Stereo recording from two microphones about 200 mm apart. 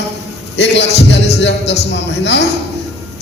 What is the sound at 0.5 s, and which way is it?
A man's voice, 60° left (ahead or behind).